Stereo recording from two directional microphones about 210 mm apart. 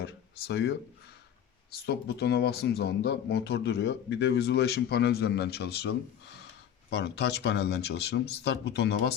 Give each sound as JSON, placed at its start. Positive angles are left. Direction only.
{"t": 0.0, "sound": "speech", "side_deg": 50}
{"t": 1.9, "sound": "speech", "side_deg": 50}
{"t": 6.9, "sound": "speech", "side_deg": 55}